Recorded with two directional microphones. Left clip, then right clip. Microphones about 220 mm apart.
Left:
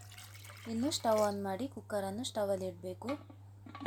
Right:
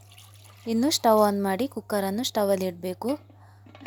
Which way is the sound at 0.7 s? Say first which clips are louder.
Right 11 dB; 45° right (ahead or behind).